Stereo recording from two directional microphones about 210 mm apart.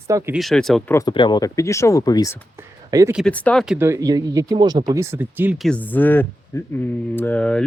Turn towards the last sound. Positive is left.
turn(degrees=5)  # may be behind; listen again after turning